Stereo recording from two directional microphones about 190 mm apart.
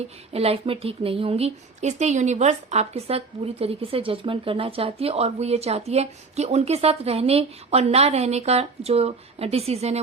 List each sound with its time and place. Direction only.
0.3 s speech: 30° right (ahead or behind)